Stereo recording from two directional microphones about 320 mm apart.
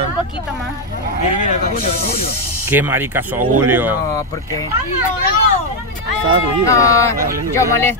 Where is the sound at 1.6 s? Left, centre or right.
Left.